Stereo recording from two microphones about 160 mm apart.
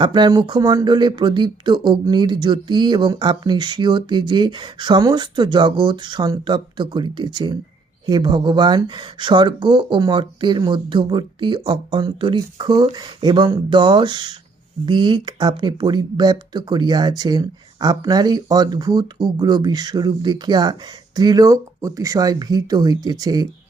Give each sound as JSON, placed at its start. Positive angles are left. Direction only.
{"t": 0.0, "sound": "speech", "side_deg": -25}